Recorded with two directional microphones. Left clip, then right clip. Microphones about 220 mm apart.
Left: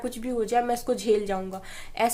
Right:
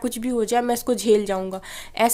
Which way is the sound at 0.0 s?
45° right (ahead or behind).